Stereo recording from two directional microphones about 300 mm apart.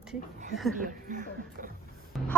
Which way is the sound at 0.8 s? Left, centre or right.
Right.